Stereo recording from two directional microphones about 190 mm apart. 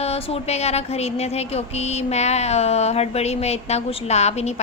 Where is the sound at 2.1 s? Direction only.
35° left (ahead or behind).